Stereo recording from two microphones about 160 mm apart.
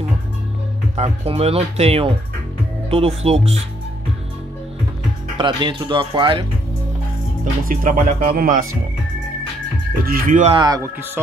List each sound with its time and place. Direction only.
0.9 s speech: 40° right (ahead or behind)
5.4 s speech: 30° right (ahead or behind)
7.6 s speech: 60° right (ahead or behind)
10.0 s speech: 60° right (ahead or behind)
10.5 s a man's voice: 30° right (ahead or behind)